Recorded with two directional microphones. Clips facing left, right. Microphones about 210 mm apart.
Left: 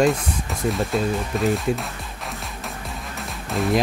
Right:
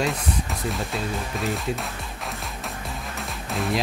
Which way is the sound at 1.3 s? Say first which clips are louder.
Left 8 dB; centre (ahead or behind).